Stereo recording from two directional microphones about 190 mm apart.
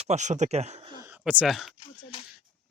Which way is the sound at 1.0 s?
5° right (ahead or behind).